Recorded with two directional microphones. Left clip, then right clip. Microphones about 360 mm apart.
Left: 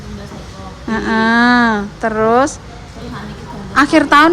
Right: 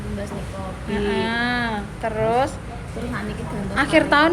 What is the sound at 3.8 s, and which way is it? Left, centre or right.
Speech, centre.